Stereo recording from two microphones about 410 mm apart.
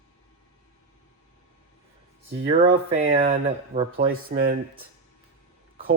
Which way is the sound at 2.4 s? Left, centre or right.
Centre.